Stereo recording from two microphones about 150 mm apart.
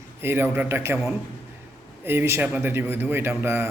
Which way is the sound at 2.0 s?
15° right (ahead or behind).